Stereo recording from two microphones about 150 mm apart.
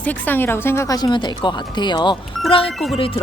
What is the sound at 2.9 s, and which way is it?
Music, 35° left (ahead or behind).